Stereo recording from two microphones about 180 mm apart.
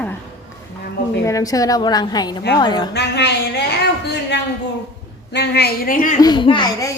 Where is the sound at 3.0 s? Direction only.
70° left (ahead or behind); by 6.2 s 50° left (ahead or behind).